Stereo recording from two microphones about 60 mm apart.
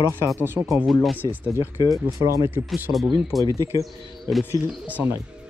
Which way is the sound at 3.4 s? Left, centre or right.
Right.